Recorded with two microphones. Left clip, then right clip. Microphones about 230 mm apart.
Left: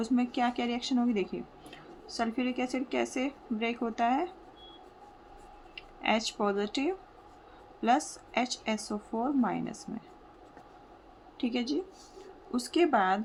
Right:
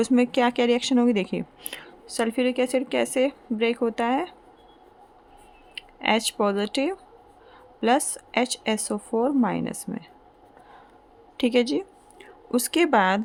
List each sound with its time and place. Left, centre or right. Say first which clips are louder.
0.0 s a woman's voice: right 9 dB; right
5.7 s a woman's voice: right 6 dB; right
11.3 s a woman's voice: right 10 dB; right